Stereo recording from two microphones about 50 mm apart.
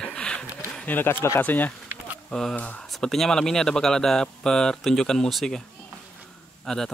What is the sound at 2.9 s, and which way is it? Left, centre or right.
Speech, centre.